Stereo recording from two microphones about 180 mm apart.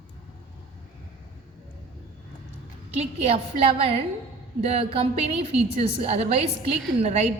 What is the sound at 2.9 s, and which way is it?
A woman's voice, 35° right (ahead or behind).